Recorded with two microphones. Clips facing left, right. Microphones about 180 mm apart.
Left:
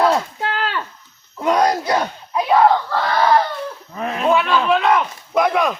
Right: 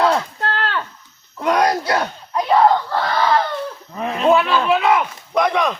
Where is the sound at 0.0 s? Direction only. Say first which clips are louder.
Left 1 dB; 10° left (ahead or behind).